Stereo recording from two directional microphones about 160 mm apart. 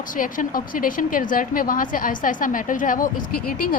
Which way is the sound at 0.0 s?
60° left (ahead or behind).